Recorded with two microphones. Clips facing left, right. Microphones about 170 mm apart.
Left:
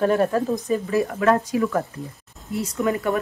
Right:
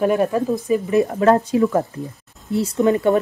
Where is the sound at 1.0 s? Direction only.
30° right (ahead or behind).